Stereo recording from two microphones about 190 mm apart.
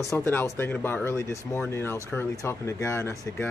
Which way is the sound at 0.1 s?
10° left (ahead or behind).